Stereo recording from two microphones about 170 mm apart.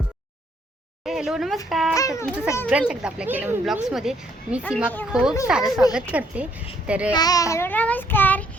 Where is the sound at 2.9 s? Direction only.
5° right (ahead or behind).